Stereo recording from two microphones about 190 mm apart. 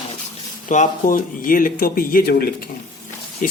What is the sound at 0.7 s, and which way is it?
Speech, 45° left (ahead or behind).